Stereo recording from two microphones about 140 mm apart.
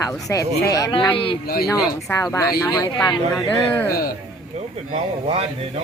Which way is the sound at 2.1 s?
20° left (ahead or behind).